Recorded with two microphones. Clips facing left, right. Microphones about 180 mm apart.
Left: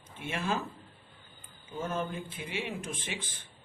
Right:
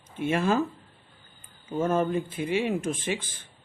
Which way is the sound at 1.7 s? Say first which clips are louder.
Right 10 dB; 55° right (ahead or behind).